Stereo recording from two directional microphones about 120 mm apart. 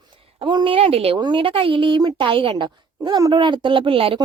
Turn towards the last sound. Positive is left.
turn(degrees=-50)  # may be behind; listen again after turning